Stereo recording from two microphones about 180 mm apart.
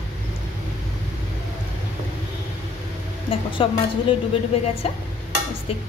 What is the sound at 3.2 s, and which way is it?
Speech, 30° left (ahead or behind).